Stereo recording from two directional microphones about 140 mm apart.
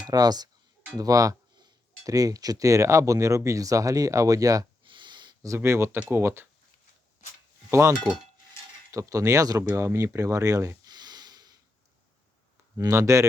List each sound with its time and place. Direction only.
0.1 s speech: 30° right (ahead or behind)
7.7 s speech: 20° right (ahead or behind)
12.7 s speech: 20° right (ahead or behind)